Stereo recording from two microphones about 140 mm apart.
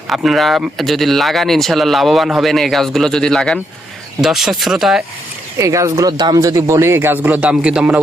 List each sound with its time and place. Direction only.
0.1 s speech: centre (ahead or behind)
5.5 s speech: 20° right (ahead or behind); by 8.0 s 5° right (ahead or behind)